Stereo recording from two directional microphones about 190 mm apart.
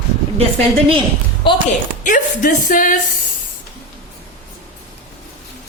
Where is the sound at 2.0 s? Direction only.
45° left (ahead or behind).